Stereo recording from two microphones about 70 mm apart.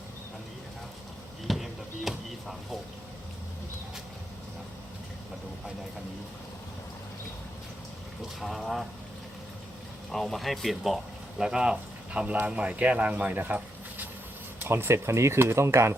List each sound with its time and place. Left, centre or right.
1.5 s a sound: centre
8.4 s speech: centre
10.1 s speech: centre; by 13.6 s right
14.6 s speech: right